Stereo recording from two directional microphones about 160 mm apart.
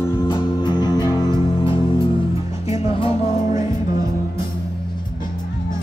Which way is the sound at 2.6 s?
40° left (ahead or behind).